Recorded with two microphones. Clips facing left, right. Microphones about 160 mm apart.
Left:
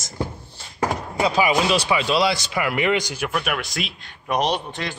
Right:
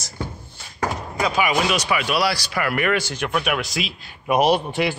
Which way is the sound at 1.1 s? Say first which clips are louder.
Left 2 dB; 30° left (ahead or behind).